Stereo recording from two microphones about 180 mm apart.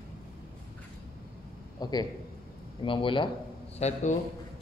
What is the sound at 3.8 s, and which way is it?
Speech, 40° left (ahead or behind).